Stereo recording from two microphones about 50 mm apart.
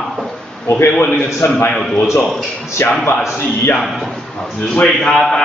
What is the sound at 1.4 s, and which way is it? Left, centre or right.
Speech, left.